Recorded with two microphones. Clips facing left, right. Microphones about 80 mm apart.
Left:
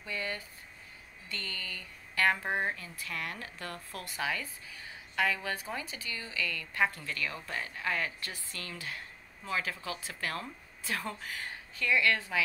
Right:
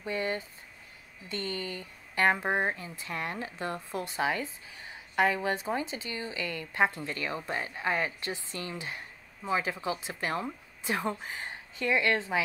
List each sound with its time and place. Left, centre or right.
0.0 s speech: right